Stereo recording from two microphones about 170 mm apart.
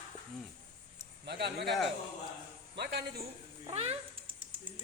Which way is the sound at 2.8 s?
80° right.